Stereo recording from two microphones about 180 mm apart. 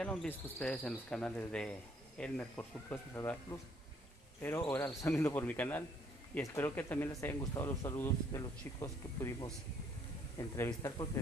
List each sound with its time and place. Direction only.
0.0 s speech: 5° left (ahead or behind)
4.6 s speech: 10° left (ahead or behind)